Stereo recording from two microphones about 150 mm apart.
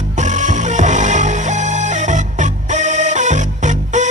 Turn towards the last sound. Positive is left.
turn(degrees=-55)  # may be behind; listen again after turning